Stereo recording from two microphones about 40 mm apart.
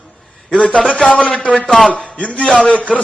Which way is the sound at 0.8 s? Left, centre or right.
Centre.